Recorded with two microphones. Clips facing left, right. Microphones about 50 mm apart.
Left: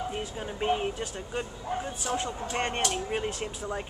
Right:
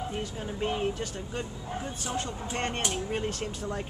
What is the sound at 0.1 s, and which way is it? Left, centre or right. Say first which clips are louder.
Speech: even; centre.